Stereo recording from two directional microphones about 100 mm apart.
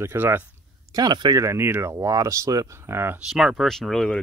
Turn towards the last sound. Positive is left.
turn(degrees=5)  # may be behind; listen again after turning